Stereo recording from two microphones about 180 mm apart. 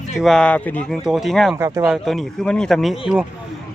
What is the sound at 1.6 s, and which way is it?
Speech, 20° right (ahead or behind).